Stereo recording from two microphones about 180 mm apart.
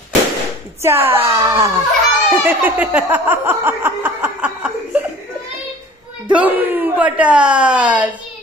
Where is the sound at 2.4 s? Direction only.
10° right (ahead or behind).